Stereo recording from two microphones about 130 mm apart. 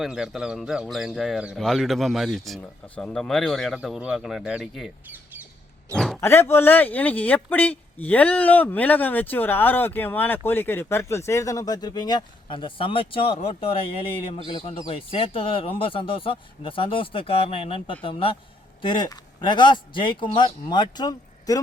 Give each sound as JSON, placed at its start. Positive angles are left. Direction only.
{"t": 0.0, "sound": "speech", "side_deg": -5}
{"t": 5.0, "sound": "squawk", "side_deg": -15}
{"t": 5.9, "sound": "speech", "side_deg": 0}
{"t": 6.1, "sound": "speech", "side_deg": 20}